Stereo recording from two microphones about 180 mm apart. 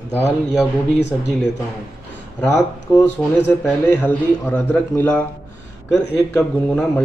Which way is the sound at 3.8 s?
10° left (ahead or behind).